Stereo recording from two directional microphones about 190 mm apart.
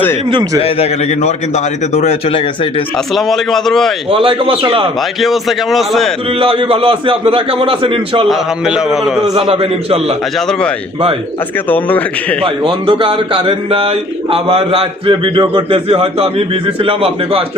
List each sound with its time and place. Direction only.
0.3 s a man's voice: 25° right (ahead or behind)
0.6 s a man's voice: 35° left (ahead or behind)
3.2 s a man's voice: centre (ahead or behind)
4.1 s a man's voice: 30° right (ahead or behind)
5.2 s a man's voice: centre (ahead or behind)
6.4 s a man's voice: 30° right (ahead or behind)
8.3 s a man's voice: 5° right (ahead or behind)
9.3 s a man's voice: 25° right (ahead or behind)
11.7 s a man's voice: 10° left (ahead or behind)
12.4 s a man's voice: 25° right (ahead or behind)